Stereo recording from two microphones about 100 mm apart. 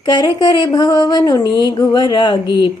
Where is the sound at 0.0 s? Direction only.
45° left (ahead or behind).